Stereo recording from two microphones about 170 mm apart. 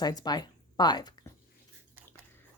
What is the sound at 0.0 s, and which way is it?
Speech, 25° left (ahead or behind).